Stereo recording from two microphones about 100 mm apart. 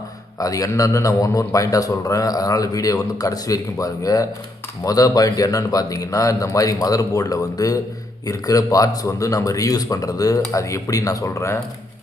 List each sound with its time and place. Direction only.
0.3 s speech: 35° left (ahead or behind)